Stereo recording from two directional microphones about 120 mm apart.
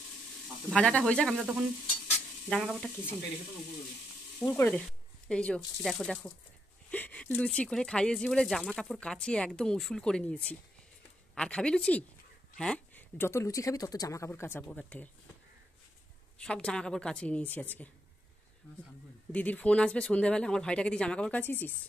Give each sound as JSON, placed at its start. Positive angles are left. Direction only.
{"t": 0.7, "sound": "speech", "side_deg": 10}
{"t": 2.5, "sound": "speech", "side_deg": 5}
{"t": 4.6, "sound": "speech", "side_deg": 15}
{"t": 4.8, "sound": "a sound", "side_deg": 10}
{"t": 5.8, "sound": "speech", "side_deg": 5}
{"t": 14.6, "sound": "speech", "side_deg": 10}
{"t": 16.3, "sound": "speech", "side_deg": 5}
{"t": 19.3, "sound": "speech", "side_deg": 10}